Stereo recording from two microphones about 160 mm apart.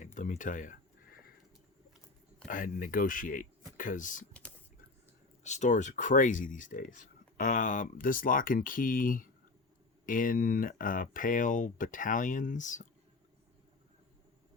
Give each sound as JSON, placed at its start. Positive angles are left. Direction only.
{"t": 0.0, "sound": "a sound", "side_deg": 50}
{"t": 2.5, "sound": "speech", "side_deg": 60}
{"t": 5.4, "sound": "speech", "side_deg": 45}